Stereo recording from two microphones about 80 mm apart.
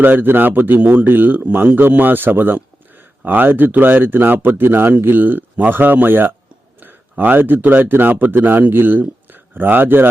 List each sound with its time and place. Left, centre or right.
0.0 s speech: right